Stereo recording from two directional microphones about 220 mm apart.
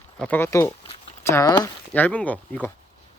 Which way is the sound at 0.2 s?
10° left (ahead or behind).